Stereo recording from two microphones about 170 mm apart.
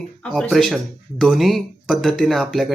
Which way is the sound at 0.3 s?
Centre (ahead or behind).